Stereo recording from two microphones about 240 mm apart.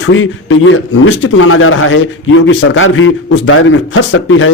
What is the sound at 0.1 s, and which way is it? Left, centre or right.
A man's voice, left.